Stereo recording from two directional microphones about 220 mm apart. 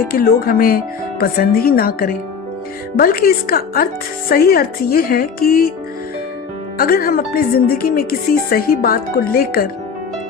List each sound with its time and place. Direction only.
0.1 s speech: 40° left (ahead or behind)
6.7 s speech: 40° left (ahead or behind)